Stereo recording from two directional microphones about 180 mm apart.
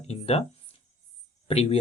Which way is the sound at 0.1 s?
35° left (ahead or behind).